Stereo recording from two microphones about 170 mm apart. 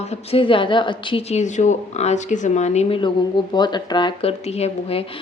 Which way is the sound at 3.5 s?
25° left (ahead or behind).